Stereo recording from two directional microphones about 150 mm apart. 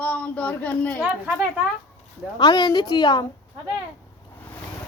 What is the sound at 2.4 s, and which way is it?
Speech, 30° left (ahead or behind).